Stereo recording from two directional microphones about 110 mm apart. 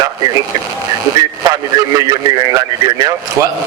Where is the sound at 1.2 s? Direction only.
35° right (ahead or behind).